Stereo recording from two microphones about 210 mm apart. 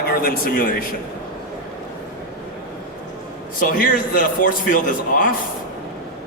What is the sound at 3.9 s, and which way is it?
A man's voice, 40° left (ahead or behind).